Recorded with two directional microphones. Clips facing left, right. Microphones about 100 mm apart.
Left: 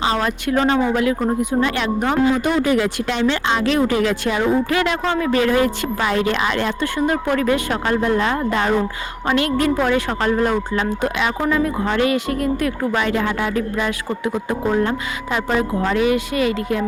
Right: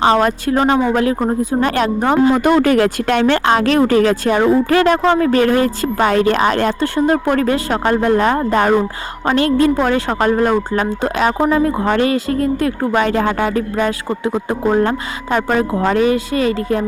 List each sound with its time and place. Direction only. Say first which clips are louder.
0.0 s speech: right 7 dB; 45° right (ahead or behind)
2.3 s speech: right 5 dB; 55° right (ahead or behind)
4.8 s speech: right 7 dB; 30° right (ahead or behind)
5.2 s speech: right 4 dB; 45° right (ahead or behind)
9.2 s speech: right 5 dB; 35° right (ahead or behind)
12.9 s speech: right 4 dB; 40° right (ahead or behind)
14.1 s speech: right 3 dB; 25° right (ahead or behind)
15.4 s speech: right 4 dB; 50° right (ahead or behind)
15.9 s speech: right 3 dB; 35° right (ahead or behind)